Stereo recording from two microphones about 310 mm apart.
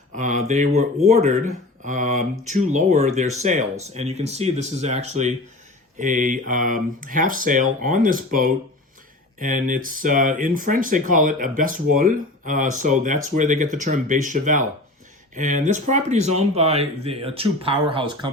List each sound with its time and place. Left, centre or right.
0.1 s speech: right